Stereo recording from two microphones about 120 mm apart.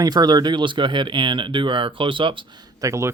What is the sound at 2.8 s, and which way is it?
Speech, 25° right (ahead or behind).